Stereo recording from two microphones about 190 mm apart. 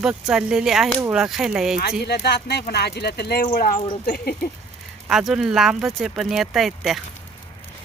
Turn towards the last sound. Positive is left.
turn(degrees=0)  # may be behind; listen again after turning